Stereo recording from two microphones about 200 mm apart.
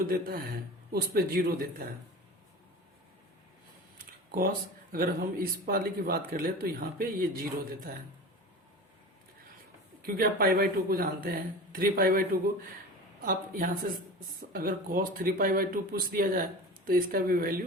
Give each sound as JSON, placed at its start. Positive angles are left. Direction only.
{"t": 0.1, "sound": "speech", "side_deg": -45}
{"t": 3.9, "sound": "speech", "side_deg": -45}
{"t": 10.2, "sound": "speech", "side_deg": -45}